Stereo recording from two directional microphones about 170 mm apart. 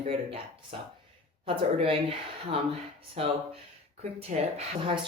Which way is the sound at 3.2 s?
35° right (ahead or behind).